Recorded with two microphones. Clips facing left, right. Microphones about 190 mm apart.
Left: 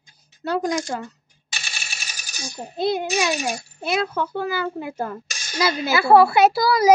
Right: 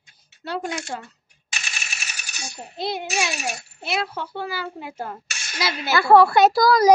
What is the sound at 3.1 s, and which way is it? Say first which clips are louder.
Speech: left 4 dB; 35° left (ahead or behind).